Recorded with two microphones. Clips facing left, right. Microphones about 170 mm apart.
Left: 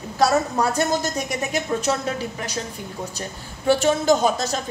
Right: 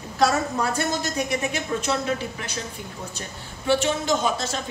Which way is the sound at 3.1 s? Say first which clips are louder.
Left 3 dB; 40° left (ahead or behind).